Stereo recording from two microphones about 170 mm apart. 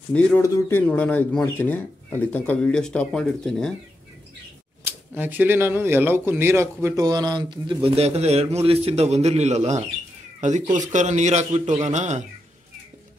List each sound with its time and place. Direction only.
0.4 s speech: 10° left (ahead or behind)
4.8 s a man's voice: 10° right (ahead or behind); by 12.3 s 45° right (ahead or behind)